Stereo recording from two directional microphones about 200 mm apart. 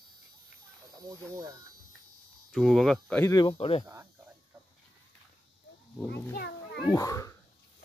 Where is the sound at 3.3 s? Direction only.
25° left (ahead or behind).